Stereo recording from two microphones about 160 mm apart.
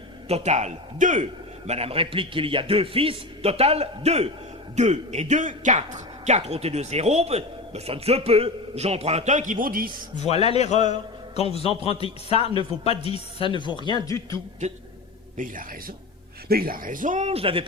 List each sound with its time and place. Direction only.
0.3 s a man's voice: 45° right (ahead or behind); by 10.0 s 65° right (ahead or behind)
10.2 s a man's voice: 40° left (ahead or behind); by 14.3 s 20° left (ahead or behind)
15.4 s speech: 55° right (ahead or behind)
16.5 s speech: 70° right (ahead or behind); by 17.7 s 35° right (ahead or behind)